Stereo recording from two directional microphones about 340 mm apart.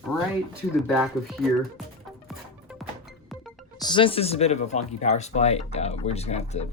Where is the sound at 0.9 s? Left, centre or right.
Centre.